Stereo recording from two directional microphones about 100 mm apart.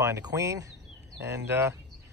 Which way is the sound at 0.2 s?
35° right (ahead or behind).